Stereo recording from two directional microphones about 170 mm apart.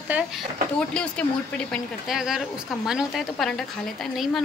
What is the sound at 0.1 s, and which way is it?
Speech, 10° right (ahead or behind).